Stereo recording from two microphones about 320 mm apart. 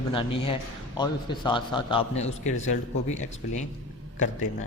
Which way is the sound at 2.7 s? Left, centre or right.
Left.